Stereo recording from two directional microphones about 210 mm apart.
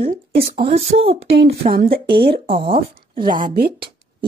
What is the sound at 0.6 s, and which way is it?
Speech, 30° right (ahead or behind).